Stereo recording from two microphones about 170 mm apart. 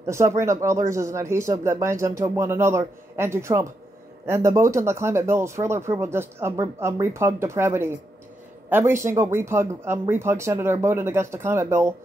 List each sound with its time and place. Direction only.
0.0 s speech: 15° right (ahead or behind)